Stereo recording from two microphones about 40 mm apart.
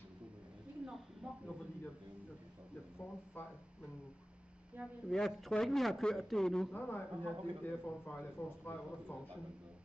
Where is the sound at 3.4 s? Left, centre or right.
Left.